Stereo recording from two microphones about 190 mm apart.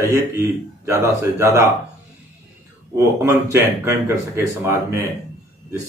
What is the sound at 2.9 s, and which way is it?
Speech, 15° right (ahead or behind).